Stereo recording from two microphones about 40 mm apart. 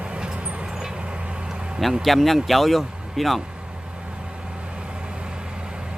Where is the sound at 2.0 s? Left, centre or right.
Centre.